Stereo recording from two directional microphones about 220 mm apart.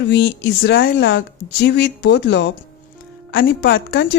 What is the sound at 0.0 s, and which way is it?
Speech, 50° left (ahead or behind).